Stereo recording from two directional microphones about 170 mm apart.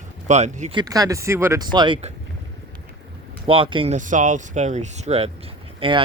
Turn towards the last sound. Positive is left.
turn(degrees=-30)  # may be behind; listen again after turning